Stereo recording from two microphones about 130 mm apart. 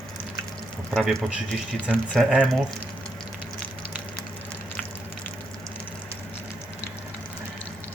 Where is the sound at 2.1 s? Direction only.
5° right (ahead or behind).